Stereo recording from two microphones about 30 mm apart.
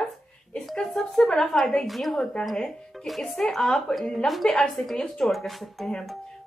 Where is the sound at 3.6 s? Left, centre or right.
Left.